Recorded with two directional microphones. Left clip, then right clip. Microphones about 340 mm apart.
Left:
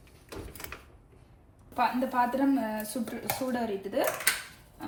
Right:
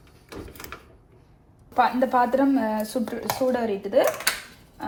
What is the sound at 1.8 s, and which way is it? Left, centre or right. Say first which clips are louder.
Speech: right 7 dB; right.